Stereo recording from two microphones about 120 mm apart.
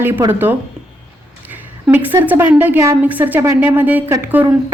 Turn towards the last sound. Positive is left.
turn(degrees=-15)  # may be behind; listen again after turning